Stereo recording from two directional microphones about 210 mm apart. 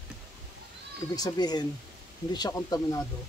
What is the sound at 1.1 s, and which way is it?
Speech, 20° left (ahead or behind).